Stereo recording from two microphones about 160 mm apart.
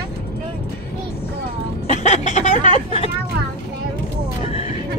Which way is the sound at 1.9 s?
45° left (ahead or behind).